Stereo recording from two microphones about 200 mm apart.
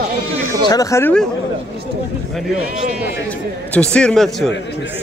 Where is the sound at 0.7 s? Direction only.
15° left (ahead or behind).